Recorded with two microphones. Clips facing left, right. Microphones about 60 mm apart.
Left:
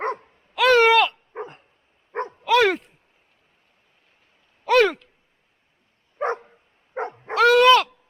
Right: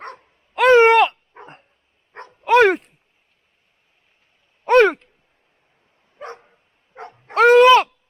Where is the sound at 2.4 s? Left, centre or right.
Right.